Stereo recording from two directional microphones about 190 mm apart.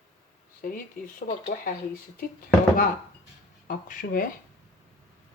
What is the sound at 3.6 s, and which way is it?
Speech, 45° left (ahead or behind).